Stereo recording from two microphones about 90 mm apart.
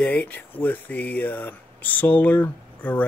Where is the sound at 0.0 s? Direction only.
15° left (ahead or behind).